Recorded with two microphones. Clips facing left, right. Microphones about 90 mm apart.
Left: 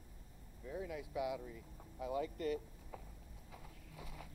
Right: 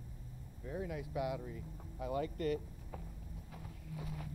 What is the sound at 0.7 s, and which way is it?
Speech, 40° right (ahead or behind).